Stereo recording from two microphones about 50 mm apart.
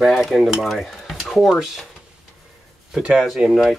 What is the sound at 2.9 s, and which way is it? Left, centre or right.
Speech, centre.